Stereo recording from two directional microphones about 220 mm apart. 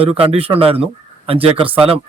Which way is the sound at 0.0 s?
25° right (ahead or behind).